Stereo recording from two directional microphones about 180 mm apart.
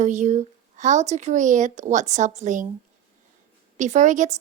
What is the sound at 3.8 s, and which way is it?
Speech, 40° right (ahead or behind).